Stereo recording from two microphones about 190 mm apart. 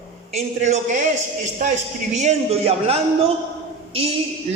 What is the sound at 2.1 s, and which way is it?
Speech, 35° right (ahead or behind).